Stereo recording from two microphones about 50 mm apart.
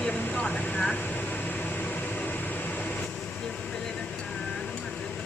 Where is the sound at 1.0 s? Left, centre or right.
Left.